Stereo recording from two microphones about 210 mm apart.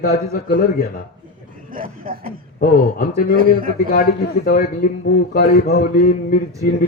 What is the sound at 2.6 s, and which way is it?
Speech, 45° left (ahead or behind).